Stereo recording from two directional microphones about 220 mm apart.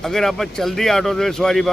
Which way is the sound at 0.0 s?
Centre (ahead or behind).